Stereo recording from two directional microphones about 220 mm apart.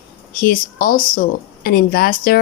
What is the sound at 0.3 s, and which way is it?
Speech, 40° left (ahead or behind).